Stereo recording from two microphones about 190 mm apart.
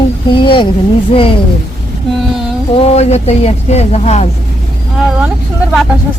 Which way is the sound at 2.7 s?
35° left (ahead or behind).